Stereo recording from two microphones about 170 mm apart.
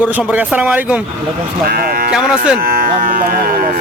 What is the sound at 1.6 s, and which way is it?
Speech, 60° right (ahead or behind).